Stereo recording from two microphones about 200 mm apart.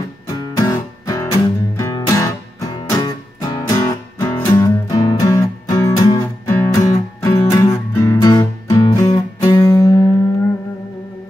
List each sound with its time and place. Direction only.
0.6 s music: 20° left (ahead or behind)